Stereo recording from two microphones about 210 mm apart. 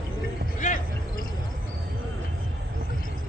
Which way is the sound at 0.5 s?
40° left (ahead or behind).